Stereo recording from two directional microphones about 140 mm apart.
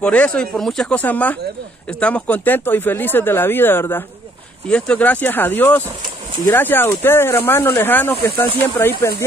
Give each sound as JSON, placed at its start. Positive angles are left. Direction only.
{"t": 0.0, "sound": "speech", "side_deg": 10}